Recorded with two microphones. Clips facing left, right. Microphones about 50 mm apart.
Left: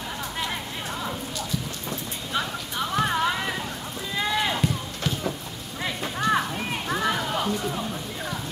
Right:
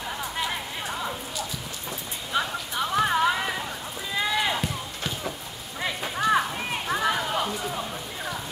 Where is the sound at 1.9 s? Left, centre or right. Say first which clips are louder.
Right 1 dB; centre.